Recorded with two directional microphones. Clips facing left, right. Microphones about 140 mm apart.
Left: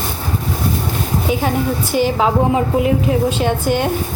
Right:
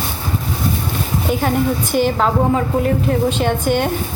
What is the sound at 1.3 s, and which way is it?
A woman's voice, centre (ahead or behind).